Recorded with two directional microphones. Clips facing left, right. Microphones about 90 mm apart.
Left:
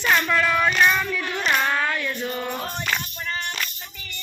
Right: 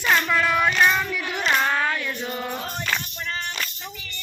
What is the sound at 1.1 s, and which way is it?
Child singing, 15° right (ahead or behind).